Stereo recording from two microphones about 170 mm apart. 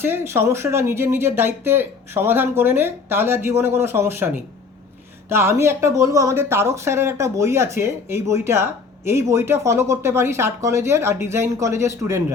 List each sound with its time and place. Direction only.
0.0 s speech: 15° right (ahead or behind)
5.3 s speech: 15° right (ahead or behind)